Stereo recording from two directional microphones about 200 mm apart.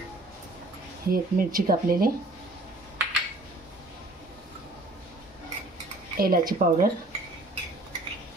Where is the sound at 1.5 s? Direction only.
45° right (ahead or behind).